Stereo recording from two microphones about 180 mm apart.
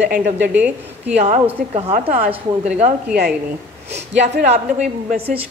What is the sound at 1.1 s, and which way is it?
A woman's voice, 40° right (ahead or behind).